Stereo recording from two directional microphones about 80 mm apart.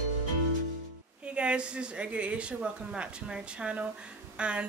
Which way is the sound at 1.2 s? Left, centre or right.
Centre.